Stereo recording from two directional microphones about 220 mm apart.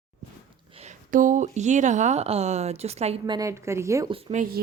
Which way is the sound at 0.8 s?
35° right (ahead or behind).